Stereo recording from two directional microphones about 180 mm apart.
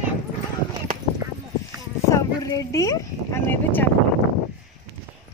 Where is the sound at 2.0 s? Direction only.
20° left (ahead or behind).